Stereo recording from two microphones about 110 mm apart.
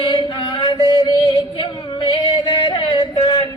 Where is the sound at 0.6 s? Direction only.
40° left (ahead or behind).